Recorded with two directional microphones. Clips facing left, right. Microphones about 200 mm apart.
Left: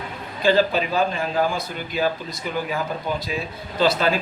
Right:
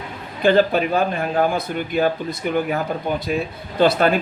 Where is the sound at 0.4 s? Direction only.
55° right (ahead or behind).